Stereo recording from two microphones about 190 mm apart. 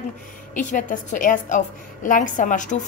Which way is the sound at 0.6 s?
40° left (ahead or behind).